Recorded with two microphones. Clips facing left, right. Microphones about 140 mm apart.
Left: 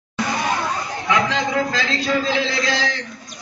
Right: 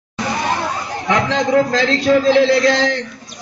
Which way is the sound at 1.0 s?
35° right (ahead or behind).